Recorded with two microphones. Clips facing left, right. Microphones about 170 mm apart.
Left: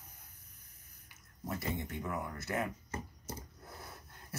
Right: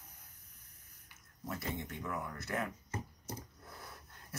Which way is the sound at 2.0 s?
20° left (ahead or behind).